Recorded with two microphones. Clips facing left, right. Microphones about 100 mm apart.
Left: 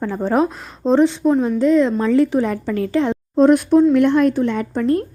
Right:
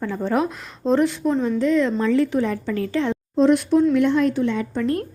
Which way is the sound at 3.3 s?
50° left (ahead or behind).